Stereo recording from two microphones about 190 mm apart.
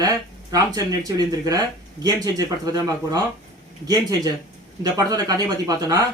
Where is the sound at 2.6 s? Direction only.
20° right (ahead or behind).